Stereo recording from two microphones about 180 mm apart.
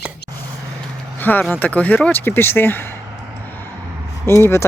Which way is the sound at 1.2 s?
10° left (ahead or behind).